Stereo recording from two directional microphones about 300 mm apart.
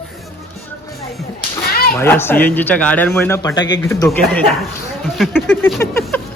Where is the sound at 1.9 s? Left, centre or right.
Centre.